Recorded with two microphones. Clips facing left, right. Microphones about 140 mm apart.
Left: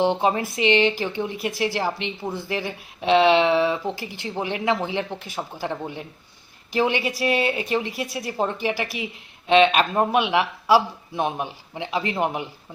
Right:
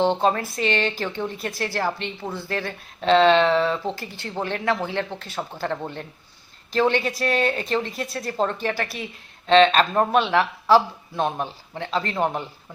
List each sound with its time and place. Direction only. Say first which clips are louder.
0.0 s speech: even; 15° left (ahead or behind)